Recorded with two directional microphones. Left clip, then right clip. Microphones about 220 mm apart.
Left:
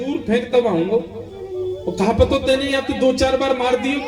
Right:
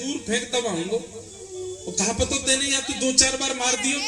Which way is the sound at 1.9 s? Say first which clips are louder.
Left 8 dB; 40° right (ahead or behind).